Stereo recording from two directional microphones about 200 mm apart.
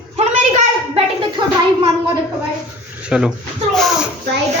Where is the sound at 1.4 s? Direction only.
25° right (ahead or behind).